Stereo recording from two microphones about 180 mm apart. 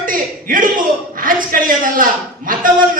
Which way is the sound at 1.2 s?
50° right (ahead or behind).